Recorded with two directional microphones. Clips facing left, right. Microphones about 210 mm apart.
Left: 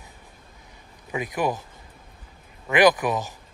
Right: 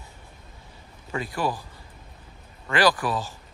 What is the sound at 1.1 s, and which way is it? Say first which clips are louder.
Speech: left 2 dB; 20° left (ahead or behind).